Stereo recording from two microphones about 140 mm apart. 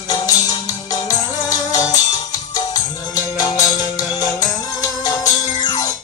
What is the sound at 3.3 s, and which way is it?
Music, 30° left (ahead or behind).